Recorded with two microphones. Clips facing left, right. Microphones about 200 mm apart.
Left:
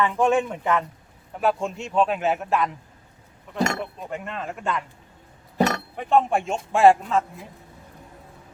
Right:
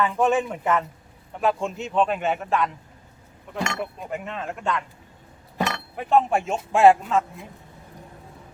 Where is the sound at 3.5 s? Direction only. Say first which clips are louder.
Left 4 dB; 40° left (ahead or behind).